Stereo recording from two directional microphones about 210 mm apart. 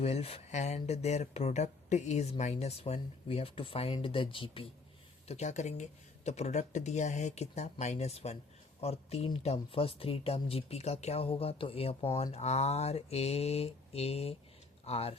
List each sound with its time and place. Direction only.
0.0 s speech: 30° left (ahead or behind)